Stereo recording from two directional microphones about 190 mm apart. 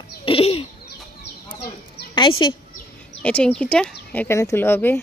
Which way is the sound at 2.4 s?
25° left (ahead or behind).